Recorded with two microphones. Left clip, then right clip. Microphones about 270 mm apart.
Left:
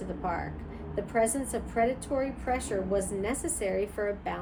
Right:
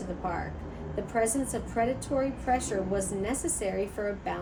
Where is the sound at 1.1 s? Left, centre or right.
Left.